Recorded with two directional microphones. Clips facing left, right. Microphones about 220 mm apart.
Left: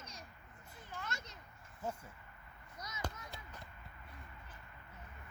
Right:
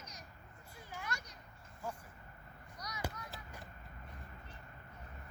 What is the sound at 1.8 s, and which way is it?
Speech, 20° left (ahead or behind).